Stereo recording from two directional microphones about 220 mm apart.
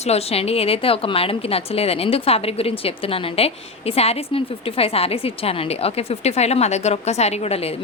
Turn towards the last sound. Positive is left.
turn(degrees=25)  # may be behind; listen again after turning